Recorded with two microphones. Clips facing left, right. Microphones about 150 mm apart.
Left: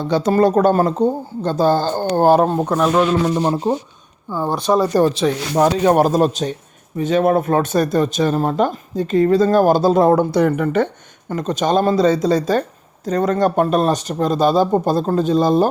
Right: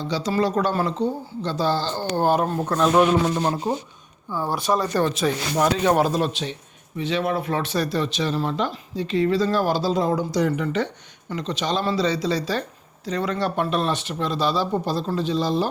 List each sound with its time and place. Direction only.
0.0 s speech: 55° left (ahead or behind); by 2.6 s 30° left (ahead or behind)
2.6 s speech: 5° left (ahead or behind)
2.9 s speech: 15° right (ahead or behind)
4.3 s speech: 20° left (ahead or behind)
4.5 s speech: centre (ahead or behind)
5.5 s speech: 40° left (ahead or behind)